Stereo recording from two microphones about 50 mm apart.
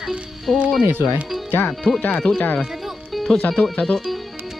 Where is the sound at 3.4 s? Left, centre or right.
Left.